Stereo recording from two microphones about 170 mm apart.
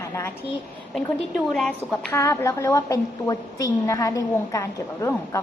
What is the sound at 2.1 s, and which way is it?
A woman's voice, 15° left (ahead or behind).